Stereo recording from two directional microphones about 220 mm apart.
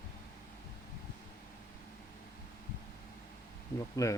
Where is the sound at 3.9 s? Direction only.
15° left (ahead or behind).